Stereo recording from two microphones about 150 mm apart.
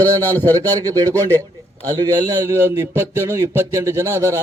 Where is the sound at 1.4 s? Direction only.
20° right (ahead or behind).